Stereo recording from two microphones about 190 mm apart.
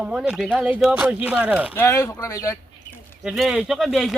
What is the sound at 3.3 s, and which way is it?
Speech, 5° right (ahead or behind).